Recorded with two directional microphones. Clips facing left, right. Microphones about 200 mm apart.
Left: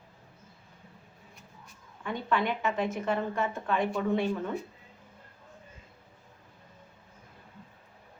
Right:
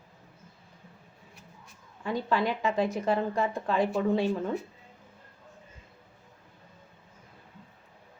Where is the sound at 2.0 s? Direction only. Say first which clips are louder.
Right 2 dB; 35° right (ahead or behind).